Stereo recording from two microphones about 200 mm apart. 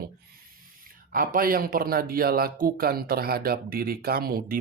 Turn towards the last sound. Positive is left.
turn(degrees=-45)  # may be behind; listen again after turning